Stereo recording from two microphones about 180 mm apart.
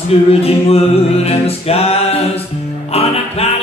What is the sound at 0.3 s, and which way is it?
Music, 35° left (ahead or behind).